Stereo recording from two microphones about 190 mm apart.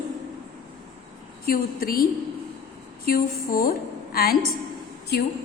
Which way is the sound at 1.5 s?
50° left (ahead or behind).